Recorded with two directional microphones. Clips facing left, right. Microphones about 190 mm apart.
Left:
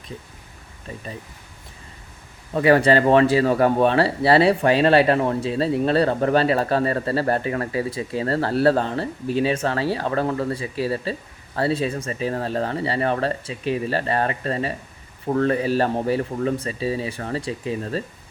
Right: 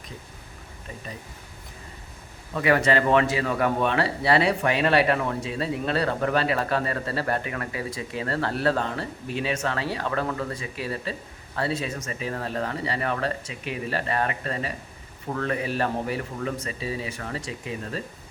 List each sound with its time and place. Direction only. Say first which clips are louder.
2.5 s speech: left 6 dB; 35° left (ahead or behind)